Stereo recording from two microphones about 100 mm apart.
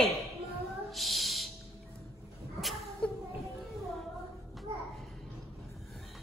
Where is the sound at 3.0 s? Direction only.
10° left (ahead or behind).